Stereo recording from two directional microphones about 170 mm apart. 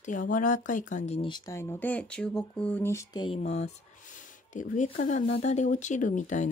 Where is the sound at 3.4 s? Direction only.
40° left (ahead or behind).